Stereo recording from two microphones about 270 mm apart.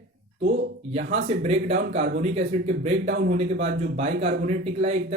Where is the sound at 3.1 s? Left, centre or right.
Right.